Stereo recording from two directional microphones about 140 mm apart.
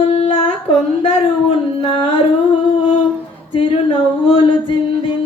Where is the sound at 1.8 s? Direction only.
40° left (ahead or behind).